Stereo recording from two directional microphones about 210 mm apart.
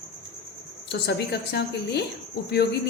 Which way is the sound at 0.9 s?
50° left (ahead or behind).